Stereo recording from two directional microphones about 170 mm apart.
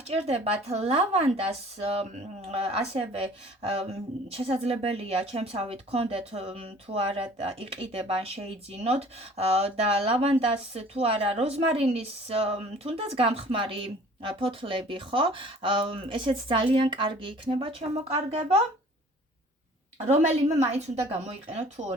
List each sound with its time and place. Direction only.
0.1 s a woman's voice: 40° right (ahead or behind)
20.1 s a woman's voice: 45° right (ahead or behind)